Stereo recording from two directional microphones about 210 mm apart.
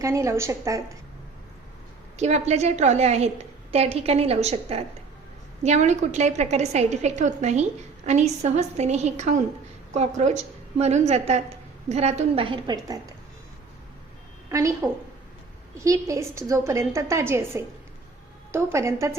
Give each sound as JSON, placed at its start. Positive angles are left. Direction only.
{"t": 0.0, "sound": "a woman's voice", "side_deg": -15}
{"t": 2.1, "sound": "a woman's voice", "side_deg": -30}
{"t": 14.5, "sound": "a woman's voice", "side_deg": -15}
{"t": 15.8, "sound": "a woman's voice", "side_deg": -15}